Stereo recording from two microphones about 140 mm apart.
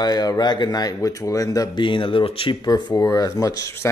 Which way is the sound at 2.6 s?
30° left (ahead or behind).